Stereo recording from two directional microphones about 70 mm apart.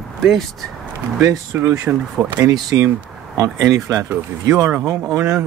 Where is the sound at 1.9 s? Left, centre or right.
Right.